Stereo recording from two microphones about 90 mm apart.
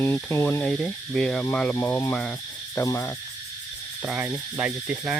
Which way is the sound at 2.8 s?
35° left (ahead or behind).